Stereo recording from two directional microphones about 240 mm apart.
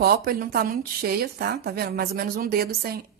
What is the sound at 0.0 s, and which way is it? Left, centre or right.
A woman's voice, right.